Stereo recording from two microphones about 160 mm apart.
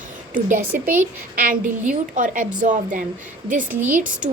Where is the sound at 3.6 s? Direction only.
10° right (ahead or behind).